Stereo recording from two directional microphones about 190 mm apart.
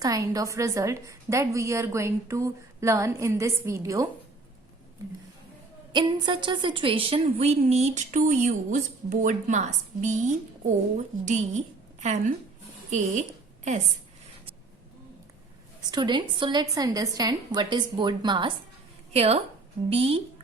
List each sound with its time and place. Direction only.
0.0 s a woman's voice: 20° right (ahead or behind)
5.9 s a woman's voice: 25° right (ahead or behind)
15.9 s a woman's voice: 25° right (ahead or behind)